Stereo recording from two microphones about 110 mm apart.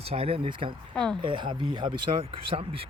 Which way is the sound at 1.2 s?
50° right (ahead or behind).